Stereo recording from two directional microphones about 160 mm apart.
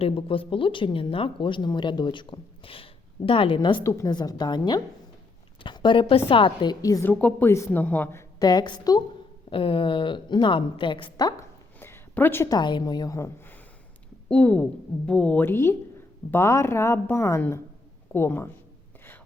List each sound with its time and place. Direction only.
0.0 s a woman's voice: 35° left (ahead or behind)
7.1 s a woman's voice: 10° left (ahead or behind)
8.4 s a woman's voice: 25° left (ahead or behind)
11.8 s a sound: 15° left (ahead or behind)
12.5 s a woman's voice: 25° left (ahead or behind)